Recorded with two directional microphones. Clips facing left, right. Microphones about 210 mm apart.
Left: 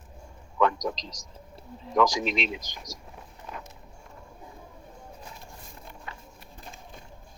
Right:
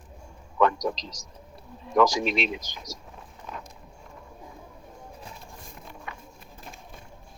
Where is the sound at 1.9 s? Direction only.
45° right (ahead or behind).